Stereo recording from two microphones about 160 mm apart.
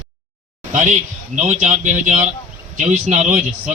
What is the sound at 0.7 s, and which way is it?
A man's voice, 50° right (ahead or behind).